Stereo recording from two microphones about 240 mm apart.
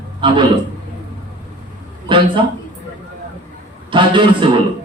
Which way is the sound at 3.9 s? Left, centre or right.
Centre.